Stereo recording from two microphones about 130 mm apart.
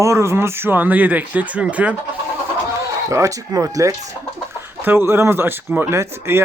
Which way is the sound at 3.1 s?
25° right (ahead or behind).